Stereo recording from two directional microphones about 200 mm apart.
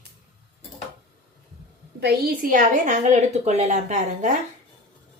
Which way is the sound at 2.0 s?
50° right (ahead or behind).